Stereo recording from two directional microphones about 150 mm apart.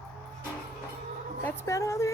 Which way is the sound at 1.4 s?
20° left (ahead or behind).